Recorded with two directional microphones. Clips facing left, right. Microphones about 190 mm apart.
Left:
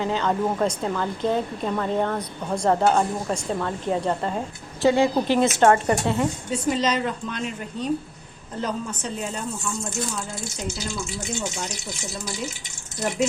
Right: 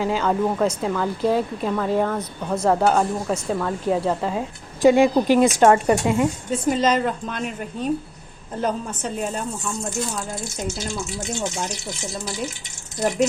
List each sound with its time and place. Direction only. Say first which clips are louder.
0.0 s a woman's voice: right 2 dB; 10° right (ahead or behind)
4.8 s a woman's voice: right 4 dB; 15° right (ahead or behind)
6.5 s a woman's voice: right 4 dB; 50° right (ahead or behind)